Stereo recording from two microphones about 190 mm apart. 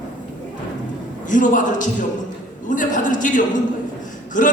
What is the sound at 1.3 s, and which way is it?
A man's voice, 40° left (ahead or behind).